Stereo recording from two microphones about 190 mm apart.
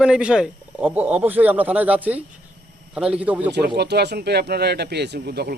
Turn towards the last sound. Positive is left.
turn(degrees=-55)  # may be behind; listen again after turning